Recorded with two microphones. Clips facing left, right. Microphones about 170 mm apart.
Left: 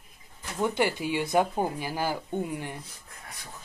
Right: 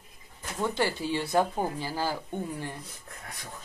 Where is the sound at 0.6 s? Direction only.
15° left (ahead or behind).